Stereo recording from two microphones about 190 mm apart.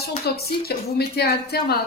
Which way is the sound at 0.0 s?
55° left (ahead or behind).